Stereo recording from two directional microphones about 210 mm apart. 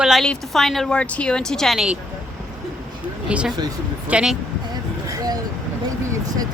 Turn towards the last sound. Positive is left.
turn(degrees=-15)  # may be behind; listen again after turning